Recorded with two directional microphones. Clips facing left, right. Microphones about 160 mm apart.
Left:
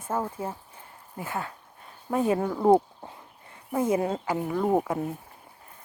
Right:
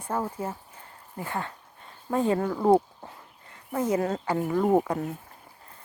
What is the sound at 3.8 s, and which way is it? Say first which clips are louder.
Speech: even; 25° left (ahead or behind).